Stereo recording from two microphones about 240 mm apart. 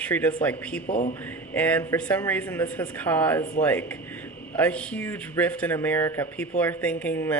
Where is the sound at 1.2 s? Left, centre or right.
Centre.